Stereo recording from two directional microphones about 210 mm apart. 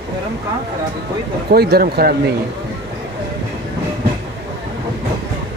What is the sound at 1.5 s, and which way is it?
Speech, 50° right (ahead or behind).